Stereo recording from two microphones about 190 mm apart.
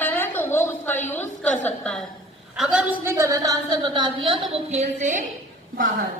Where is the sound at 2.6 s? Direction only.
5° right (ahead or behind); by 5.3 s 40° right (ahead or behind).